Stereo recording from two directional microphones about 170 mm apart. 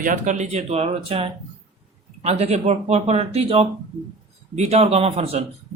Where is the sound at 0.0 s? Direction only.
50° right (ahead or behind).